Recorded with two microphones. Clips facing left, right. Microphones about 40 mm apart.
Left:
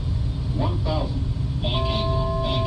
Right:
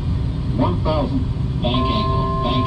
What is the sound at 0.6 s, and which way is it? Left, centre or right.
Vehicle, right.